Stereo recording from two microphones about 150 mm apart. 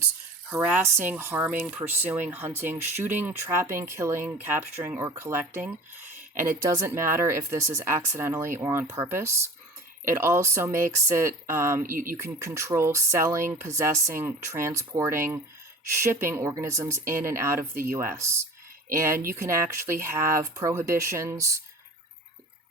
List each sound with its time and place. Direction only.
0.5 s speech: 15° right (ahead or behind)
11.9 s speech: 70° right (ahead or behind)
12.1 s speech: 15° right (ahead or behind)